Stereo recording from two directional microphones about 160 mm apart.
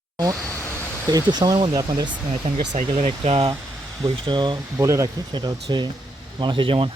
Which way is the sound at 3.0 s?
40° right (ahead or behind).